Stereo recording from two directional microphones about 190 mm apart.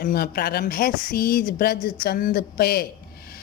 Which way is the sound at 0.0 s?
55° left (ahead or behind).